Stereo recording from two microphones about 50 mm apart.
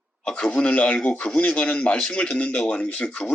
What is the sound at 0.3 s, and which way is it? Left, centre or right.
A man's voice, centre.